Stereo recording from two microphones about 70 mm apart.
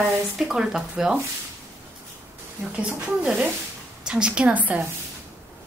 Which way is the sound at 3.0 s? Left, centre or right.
Centre.